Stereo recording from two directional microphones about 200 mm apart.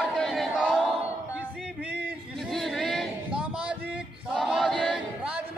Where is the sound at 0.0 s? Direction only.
Centre (ahead or behind).